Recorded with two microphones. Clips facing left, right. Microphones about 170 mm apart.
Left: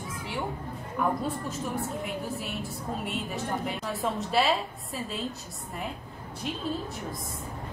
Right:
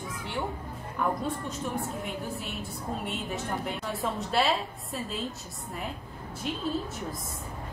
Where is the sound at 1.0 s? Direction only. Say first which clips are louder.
Left 1 dB; 5° left (ahead or behind).